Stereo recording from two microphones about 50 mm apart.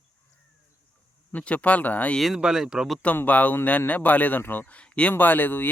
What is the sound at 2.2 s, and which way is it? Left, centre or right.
Speech, centre.